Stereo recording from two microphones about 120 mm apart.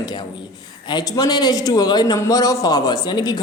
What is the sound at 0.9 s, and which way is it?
Speech, 35° left (ahead or behind).